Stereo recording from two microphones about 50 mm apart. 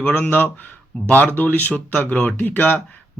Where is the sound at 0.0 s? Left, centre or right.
Left.